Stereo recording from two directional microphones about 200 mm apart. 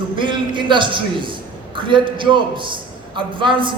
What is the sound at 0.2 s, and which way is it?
A man's voice, 25° right (ahead or behind).